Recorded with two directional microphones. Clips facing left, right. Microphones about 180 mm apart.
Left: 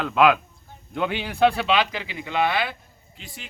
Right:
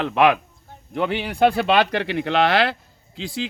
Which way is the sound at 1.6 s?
55° right (ahead or behind).